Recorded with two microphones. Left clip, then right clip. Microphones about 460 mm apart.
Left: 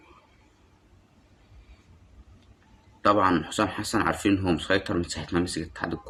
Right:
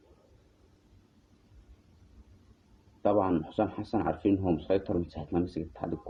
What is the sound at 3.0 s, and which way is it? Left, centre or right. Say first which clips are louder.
Speech: left 6 dB; right.